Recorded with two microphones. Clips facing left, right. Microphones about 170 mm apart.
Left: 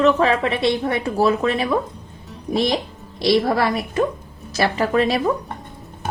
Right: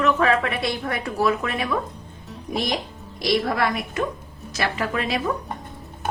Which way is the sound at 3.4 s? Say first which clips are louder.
Left 4 dB; 30° left (ahead or behind).